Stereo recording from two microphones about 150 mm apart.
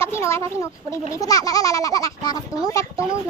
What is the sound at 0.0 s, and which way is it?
Speech, 20° left (ahead or behind).